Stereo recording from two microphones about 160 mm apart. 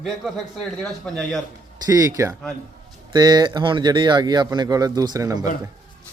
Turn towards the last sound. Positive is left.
turn(degrees=-25)  # may be behind; listen again after turning